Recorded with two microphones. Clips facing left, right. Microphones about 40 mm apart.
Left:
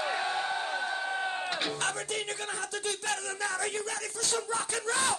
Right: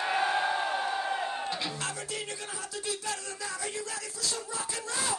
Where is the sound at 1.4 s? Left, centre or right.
Left.